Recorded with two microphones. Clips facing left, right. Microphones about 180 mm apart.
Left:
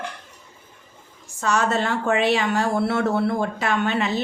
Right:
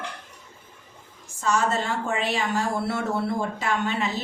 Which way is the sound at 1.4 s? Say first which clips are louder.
Left 2 dB; 70° left (ahead or behind).